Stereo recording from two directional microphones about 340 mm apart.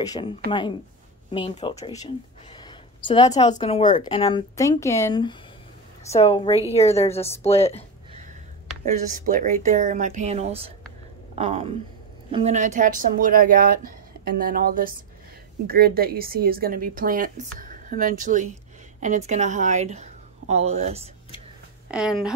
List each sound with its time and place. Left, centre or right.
0.0 s a woman's voice: centre
8.9 s a woman's voice: right
21.9 s speech: centre